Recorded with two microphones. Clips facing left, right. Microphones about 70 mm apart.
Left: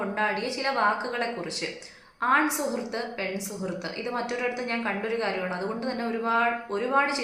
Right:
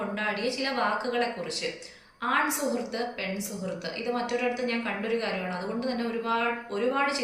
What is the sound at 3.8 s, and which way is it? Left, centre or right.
A woman's voice, left.